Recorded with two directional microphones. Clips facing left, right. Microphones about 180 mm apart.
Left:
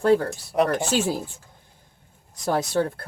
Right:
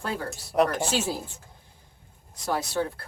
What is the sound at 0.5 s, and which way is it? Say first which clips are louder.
Speech: left 1 dB; centre (ahead or behind).